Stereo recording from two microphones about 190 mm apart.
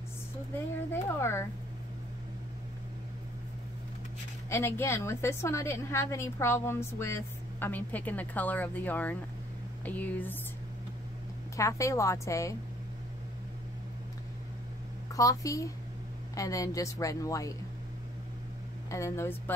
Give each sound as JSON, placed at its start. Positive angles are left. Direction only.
{"t": 1.0, "sound": "a woman's voice", "side_deg": 15}
{"t": 4.5, "sound": "a woman's voice", "side_deg": 15}
{"t": 11.5, "sound": "a woman's voice", "side_deg": 15}
{"t": 15.1, "sound": "a woman's voice", "side_deg": 15}
{"t": 18.9, "sound": "a woman's voice", "side_deg": 15}